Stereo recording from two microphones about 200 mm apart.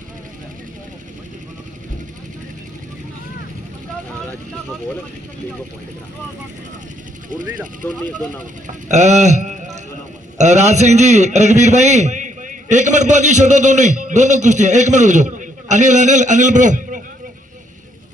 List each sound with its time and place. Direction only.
7.8 s speech: 10° left (ahead or behind)
8.6 s a man's voice: 35° right (ahead or behind)